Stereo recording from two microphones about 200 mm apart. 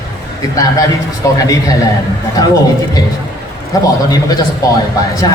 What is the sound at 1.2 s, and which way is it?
Speech, 15° left (ahead or behind).